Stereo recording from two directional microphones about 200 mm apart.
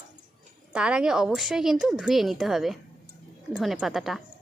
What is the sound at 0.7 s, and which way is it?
Speech, 5° right (ahead or behind).